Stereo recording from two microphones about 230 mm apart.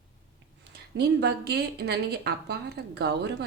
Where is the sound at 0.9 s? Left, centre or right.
Right.